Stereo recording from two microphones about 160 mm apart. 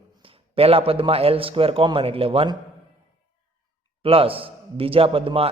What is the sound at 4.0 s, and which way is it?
Speech, 35° right (ahead or behind).